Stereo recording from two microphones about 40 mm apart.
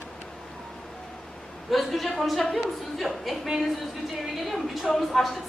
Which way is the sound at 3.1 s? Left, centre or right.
Centre.